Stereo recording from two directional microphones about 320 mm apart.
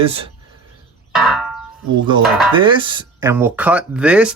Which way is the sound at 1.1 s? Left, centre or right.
Centre.